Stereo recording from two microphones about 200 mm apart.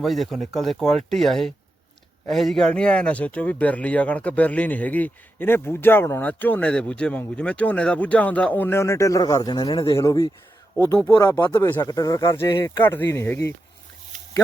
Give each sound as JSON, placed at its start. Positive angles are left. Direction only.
{"t": 0.0, "sound": "speech", "side_deg": 0}